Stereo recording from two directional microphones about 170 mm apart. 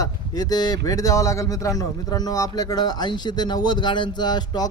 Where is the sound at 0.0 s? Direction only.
20° left (ahead or behind).